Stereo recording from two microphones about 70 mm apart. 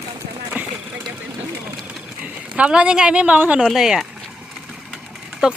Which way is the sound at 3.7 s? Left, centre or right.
Centre.